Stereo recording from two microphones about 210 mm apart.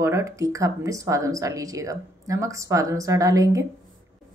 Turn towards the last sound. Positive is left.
turn(degrees=-15)  # may be behind; listen again after turning